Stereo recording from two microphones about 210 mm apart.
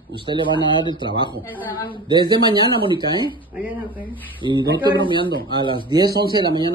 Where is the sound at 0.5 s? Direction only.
20° left (ahead or behind).